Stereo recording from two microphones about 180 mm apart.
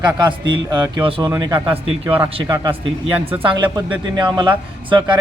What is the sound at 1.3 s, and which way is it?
Speech, 15° right (ahead or behind).